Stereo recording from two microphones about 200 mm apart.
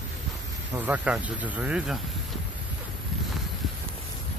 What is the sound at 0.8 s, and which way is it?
Speech, 5° right (ahead or behind).